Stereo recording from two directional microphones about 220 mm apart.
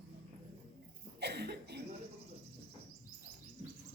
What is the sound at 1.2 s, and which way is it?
Cough, 50° right (ahead or behind).